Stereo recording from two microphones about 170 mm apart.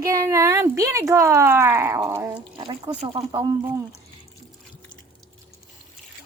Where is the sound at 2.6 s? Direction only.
25° right (ahead or behind).